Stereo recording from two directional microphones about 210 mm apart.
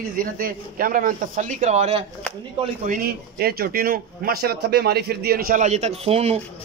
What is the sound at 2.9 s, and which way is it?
A man's voice, 45° right (ahead or behind).